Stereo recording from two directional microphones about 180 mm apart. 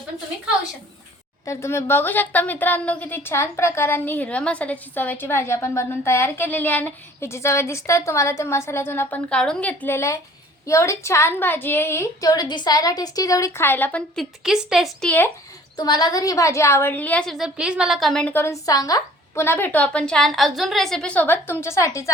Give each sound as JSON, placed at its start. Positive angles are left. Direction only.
{"t": 1.5, "sound": "a woman's voice", "side_deg": 15}
{"t": 14.4, "sound": "a woman's voice", "side_deg": 0}
{"t": 15.7, "sound": "a woman's voice", "side_deg": 20}